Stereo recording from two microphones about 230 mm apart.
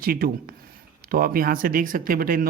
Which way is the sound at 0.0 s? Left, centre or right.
Right.